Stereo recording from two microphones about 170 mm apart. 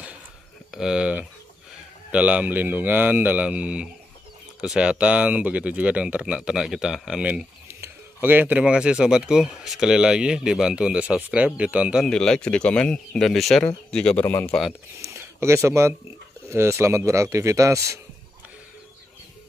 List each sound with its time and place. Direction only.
0.7 s speech: 5° right (ahead or behind)
15.0 s speech: 15° right (ahead or behind)